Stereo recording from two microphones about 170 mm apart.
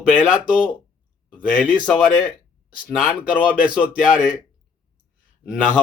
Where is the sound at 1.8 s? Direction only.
15° left (ahead or behind).